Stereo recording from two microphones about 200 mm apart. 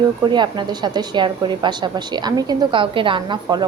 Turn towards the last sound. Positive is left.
turn(degrees=-20)  # may be behind; listen again after turning